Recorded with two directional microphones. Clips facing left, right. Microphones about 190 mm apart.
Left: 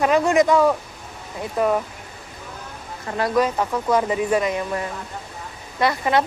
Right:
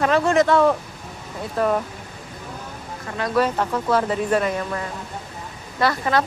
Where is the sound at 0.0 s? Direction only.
15° left (ahead or behind).